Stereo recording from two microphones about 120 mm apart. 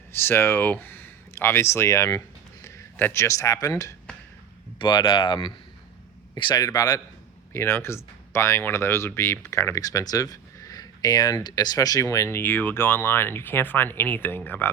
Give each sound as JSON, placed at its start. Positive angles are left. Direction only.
{"t": 0.1, "sound": "speech", "side_deg": 20}
{"t": 4.8, "sound": "speech", "side_deg": 40}
{"t": 7.5, "sound": "speech", "side_deg": 20}